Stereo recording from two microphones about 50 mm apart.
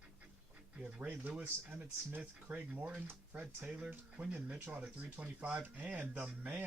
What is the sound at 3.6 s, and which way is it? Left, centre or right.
Speech, centre.